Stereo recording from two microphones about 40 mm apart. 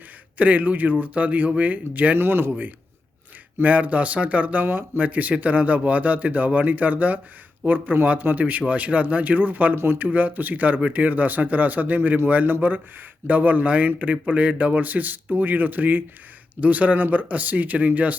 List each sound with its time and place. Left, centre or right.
0.3 s speech: right
2.1 s speech: right
3.6 s speech: right
4.6 s speech: right
5.0 s speech: right
9.7 s speech: right
10.0 s speech: right